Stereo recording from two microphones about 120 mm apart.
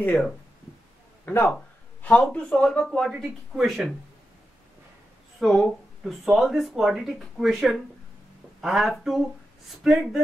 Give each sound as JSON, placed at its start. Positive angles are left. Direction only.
{"t": 1.2, "sound": "a man's voice", "side_deg": 15}
{"t": 5.4, "sound": "speech", "side_deg": 0}